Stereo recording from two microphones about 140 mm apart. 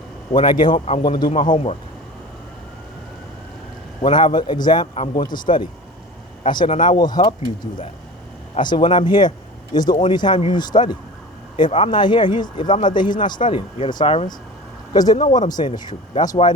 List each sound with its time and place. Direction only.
0.3 s speech: 35° left (ahead or behind)
4.0 s speech: 35° left (ahead or behind)
8.5 s speech: 35° left (ahead or behind)
14.9 s speech: 30° left (ahead or behind)